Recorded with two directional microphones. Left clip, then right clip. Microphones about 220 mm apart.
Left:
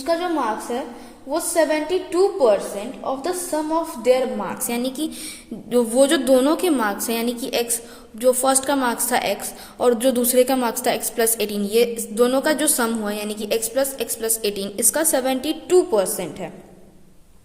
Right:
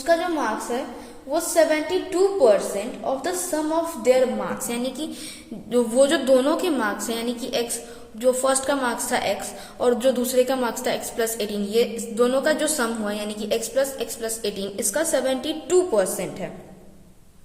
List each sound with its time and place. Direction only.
0.0 s a woman's voice: 35° left (ahead or behind)